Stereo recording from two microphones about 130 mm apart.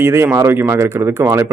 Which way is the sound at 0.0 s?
20° right (ahead or behind).